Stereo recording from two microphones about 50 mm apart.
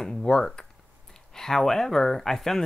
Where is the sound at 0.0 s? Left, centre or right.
Centre.